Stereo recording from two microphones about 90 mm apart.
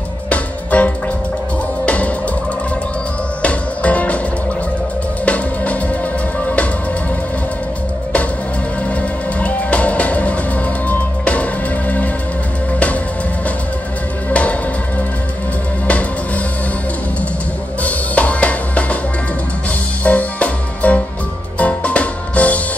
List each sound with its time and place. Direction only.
0.3 s music: 15° left (ahead or behind)
3.4 s music: 15° left (ahead or behind)
5.2 s music: 15° left (ahead or behind)
9.4 s music: 15° left (ahead or behind)
14.3 s music: 15° left (ahead or behind)
17.8 s drum kit: 15° left (ahead or behind)
20.0 s music: 15° left (ahead or behind)